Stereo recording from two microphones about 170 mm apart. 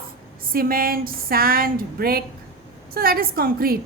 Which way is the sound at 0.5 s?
60° right (ahead or behind).